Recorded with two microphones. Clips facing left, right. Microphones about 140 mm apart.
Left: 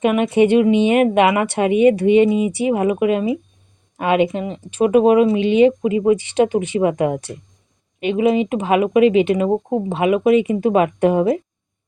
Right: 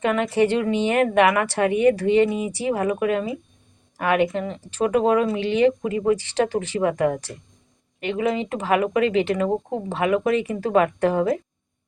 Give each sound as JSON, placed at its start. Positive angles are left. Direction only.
{"t": 0.0, "sound": "speech", "side_deg": 20}